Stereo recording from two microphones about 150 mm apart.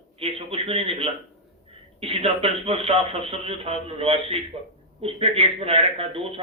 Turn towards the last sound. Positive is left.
turn(degrees=-40)  # may be behind; listen again after turning